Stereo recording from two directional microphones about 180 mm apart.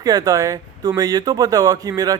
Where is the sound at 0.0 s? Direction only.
20° right (ahead or behind).